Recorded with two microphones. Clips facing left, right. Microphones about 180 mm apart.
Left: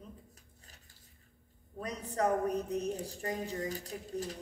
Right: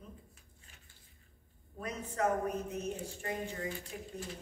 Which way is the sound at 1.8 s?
35° left (ahead or behind).